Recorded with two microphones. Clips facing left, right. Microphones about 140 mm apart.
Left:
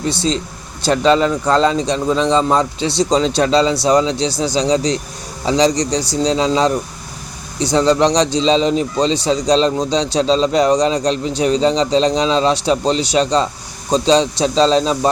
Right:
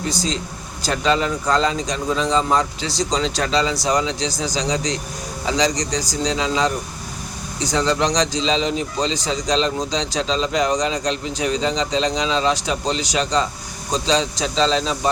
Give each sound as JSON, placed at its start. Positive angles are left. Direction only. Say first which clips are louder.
{"t": 0.1, "sound": "a man's voice", "louder": "left 5 dB", "side_deg": 30}